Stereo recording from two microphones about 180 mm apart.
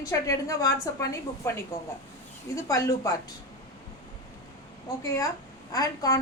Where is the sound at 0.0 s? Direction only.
20° left (ahead or behind).